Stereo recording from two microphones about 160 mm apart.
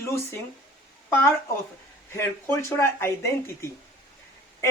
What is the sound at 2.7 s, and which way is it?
Speech, 15° left (ahead or behind).